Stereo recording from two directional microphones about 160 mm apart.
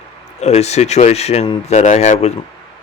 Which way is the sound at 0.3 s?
45° left (ahead or behind).